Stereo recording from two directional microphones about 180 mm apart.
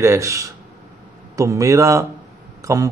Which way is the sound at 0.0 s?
15° right (ahead or behind).